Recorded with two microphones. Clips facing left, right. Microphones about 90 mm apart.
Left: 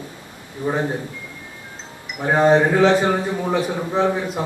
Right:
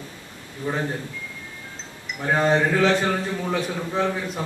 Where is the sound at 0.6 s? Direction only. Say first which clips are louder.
Left 4 dB; 15° left (ahead or behind).